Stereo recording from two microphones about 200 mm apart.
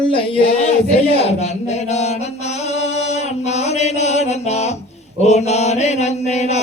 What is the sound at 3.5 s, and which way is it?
Mantra, 35° left (ahead or behind).